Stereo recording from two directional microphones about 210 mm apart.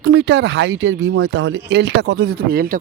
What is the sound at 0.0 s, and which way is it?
Speech, 60° right (ahead or behind).